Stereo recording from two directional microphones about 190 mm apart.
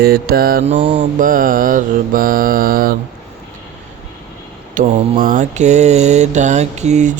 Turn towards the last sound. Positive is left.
turn(degrees=-40)  # may be behind; listen again after turning